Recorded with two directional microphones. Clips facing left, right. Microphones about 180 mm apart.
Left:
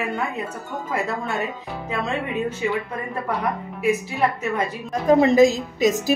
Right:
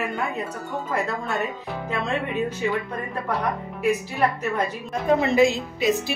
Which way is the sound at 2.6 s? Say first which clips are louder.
Left 1 dB; 5° left (ahead or behind).